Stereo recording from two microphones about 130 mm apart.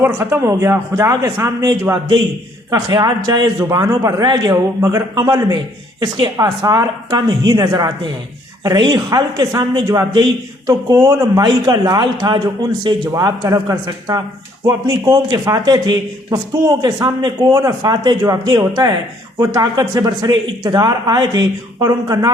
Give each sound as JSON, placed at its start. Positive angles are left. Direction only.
{"t": 0.0, "sound": "a man's voice", "side_deg": -20}